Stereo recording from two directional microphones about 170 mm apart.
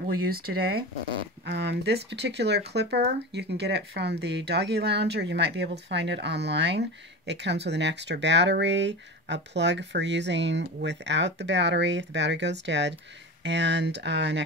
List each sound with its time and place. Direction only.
0.0 s speech: 65° right (ahead or behind)
1.4 s speech: 80° right